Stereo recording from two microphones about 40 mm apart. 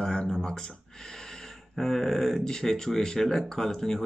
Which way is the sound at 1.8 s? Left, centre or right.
Centre.